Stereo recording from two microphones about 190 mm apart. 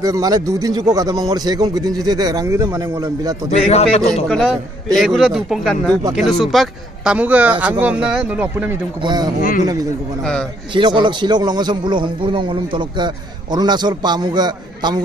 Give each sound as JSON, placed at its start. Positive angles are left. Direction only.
{"t": 0.0, "sound": "a man's voice", "side_deg": -20}
{"t": 3.4, "sound": "speech", "side_deg": 35}
{"t": 4.1, "sound": "speech", "side_deg": 5}
{"t": 9.0, "sound": "a man's voice", "side_deg": -20}
{"t": 9.4, "sound": "a man's voice", "side_deg": 50}
{"t": 10.7, "sound": "a man's voice", "side_deg": -25}